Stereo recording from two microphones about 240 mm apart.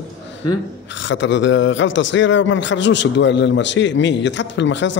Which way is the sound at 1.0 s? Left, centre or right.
Left.